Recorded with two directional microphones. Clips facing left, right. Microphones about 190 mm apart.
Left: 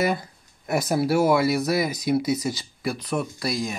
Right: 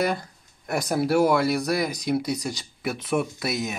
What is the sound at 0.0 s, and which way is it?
Speech, 5° left (ahead or behind).